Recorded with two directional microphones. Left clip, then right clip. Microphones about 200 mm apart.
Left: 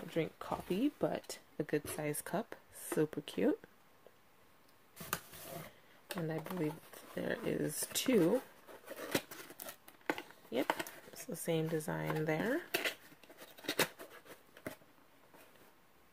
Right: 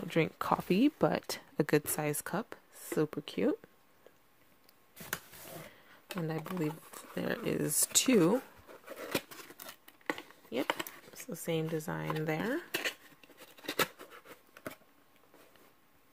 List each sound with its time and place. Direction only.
0.1 s speech: 45° right (ahead or behind)
2.0 s speech: 30° right (ahead or behind)
6.1 s speech: 30° right (ahead or behind)
8.8 s a sound: centre (ahead or behind)
9.1 s scissors: 10° right (ahead or behind)
10.7 s speech: 20° right (ahead or behind)
12.7 s scissors: centre (ahead or behind)